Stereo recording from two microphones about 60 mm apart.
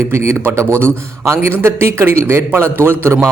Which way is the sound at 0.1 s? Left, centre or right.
Right.